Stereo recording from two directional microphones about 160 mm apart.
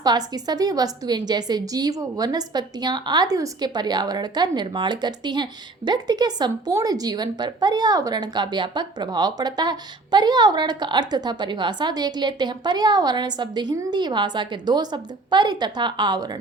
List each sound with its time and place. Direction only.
0.0 s a woman's voice: 25° right (ahead or behind)